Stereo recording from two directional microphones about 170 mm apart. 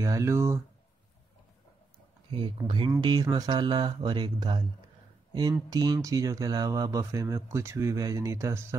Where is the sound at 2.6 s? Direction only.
25° right (ahead or behind).